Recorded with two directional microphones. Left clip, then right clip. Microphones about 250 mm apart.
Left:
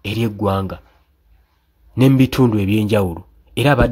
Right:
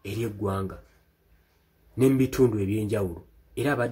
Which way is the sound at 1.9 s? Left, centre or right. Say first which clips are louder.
Left 7 dB; left.